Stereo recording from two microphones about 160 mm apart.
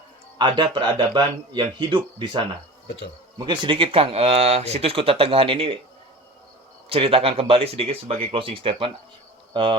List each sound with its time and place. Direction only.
0.3 s speech: 30° right (ahead or behind)
2.8 s speech: 90° left
3.3 s speech: 30° right (ahead or behind)
6.9 s speech: 35° right (ahead or behind)